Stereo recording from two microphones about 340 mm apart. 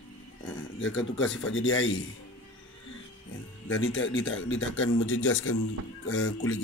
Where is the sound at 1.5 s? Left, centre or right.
Left.